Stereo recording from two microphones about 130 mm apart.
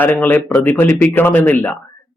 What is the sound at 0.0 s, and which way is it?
Speech, 15° left (ahead or behind).